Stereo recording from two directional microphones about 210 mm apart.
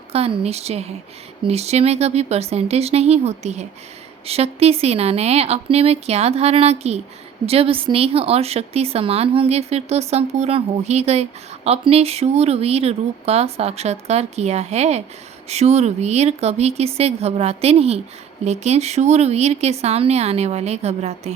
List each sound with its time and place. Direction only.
0.1 s speech: 30° right (ahead or behind)